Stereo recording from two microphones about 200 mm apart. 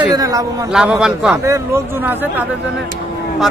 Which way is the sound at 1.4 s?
15° right (ahead or behind).